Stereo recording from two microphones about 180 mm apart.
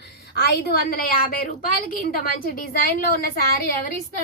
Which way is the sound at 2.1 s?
55° left (ahead or behind).